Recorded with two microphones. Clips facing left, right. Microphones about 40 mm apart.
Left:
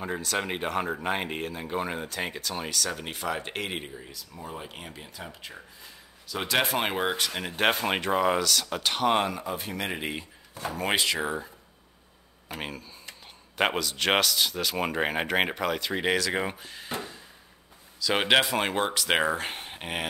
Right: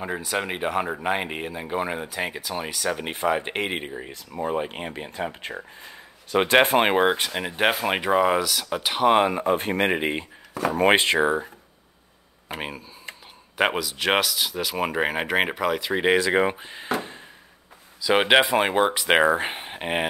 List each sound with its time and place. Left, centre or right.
0.0 s speech: centre
9.4 s speech: right
12.5 s speech: centre
18.0 s speech: centre